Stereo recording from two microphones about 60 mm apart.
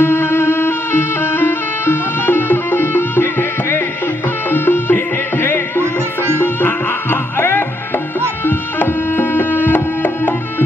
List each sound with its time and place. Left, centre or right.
0.0 s music: left
8.5 s tabla: left